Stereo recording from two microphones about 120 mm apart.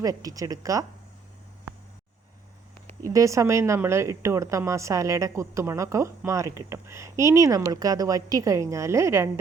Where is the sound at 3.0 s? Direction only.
30° right (ahead or behind).